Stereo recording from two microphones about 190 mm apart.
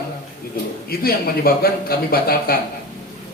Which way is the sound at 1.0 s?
50° left (ahead or behind).